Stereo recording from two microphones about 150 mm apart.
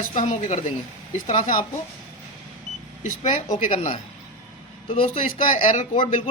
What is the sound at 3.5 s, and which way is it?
Speech, 50° left (ahead or behind).